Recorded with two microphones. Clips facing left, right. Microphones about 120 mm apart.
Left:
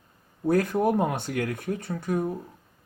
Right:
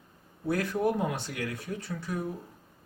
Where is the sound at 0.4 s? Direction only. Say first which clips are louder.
Left 5 dB; 45° left (ahead or behind).